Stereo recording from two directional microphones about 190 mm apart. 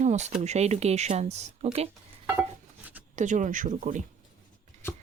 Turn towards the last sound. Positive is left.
turn(degrees=-40)  # may be behind; listen again after turning